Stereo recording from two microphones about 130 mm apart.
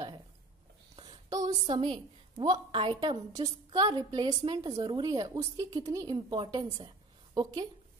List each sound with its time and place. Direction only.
0.9 s a sound: 35° right (ahead or behind)
1.7 s a woman's voice: 40° right (ahead or behind)
6.3 s a woman's voice: 40° right (ahead or behind)